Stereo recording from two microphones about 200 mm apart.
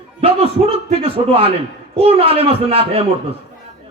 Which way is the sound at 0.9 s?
30° right (ahead or behind).